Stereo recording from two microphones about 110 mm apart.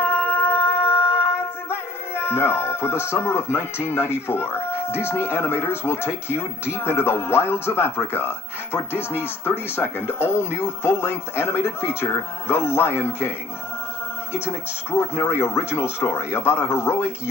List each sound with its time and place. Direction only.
0.0 s music: 20° left (ahead or behind)
4.3 s speech: 20° left (ahead or behind)
14.3 s speech: 25° left (ahead or behind)